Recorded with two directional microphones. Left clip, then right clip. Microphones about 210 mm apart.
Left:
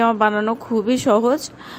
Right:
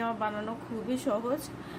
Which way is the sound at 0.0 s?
45° left (ahead or behind).